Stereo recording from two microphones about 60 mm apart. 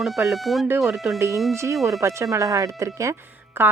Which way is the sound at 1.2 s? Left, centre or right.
Right.